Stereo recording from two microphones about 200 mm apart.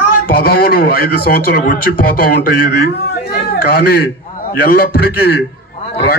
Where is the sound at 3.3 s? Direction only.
55° left (ahead or behind).